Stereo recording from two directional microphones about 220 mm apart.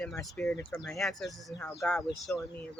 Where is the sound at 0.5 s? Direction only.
15° left (ahead or behind).